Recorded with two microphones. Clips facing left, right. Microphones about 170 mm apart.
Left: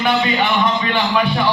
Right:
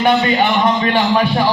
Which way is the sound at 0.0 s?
40° right (ahead or behind).